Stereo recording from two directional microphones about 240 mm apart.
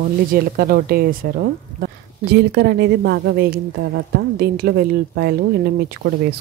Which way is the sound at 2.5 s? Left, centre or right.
Right.